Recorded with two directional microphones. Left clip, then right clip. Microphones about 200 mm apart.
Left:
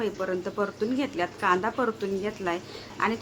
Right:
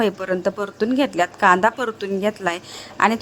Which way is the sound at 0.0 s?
40° right (ahead or behind).